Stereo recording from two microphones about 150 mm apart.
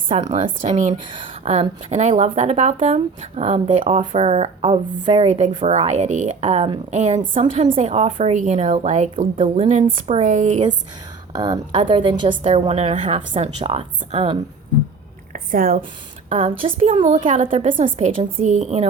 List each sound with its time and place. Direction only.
0.1 s a woman's voice: 55° right (ahead or behind)
1.1 s a woman's voice: 40° right (ahead or behind)
4.0 s a woman's voice: 40° right (ahead or behind)
9.8 s a woman's voice: 40° right (ahead or behind)
10.2 s a woman's voice: 55° right (ahead or behind)
11.3 s a woman's voice: 30° right (ahead or behind)
15.3 s a sound: 65° right (ahead or behind)
16.6 s a woman's voice: 40° right (ahead or behind)
18.3 s a woman's voice: 55° right (ahead or behind)